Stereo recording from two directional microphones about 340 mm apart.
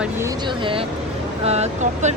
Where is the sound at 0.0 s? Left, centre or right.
Centre.